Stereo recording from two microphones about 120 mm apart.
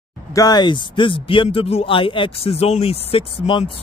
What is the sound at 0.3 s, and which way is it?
Speech, 30° left (ahead or behind).